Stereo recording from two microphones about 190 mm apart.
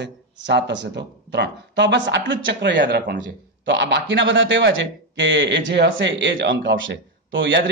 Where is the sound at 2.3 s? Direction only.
85° right.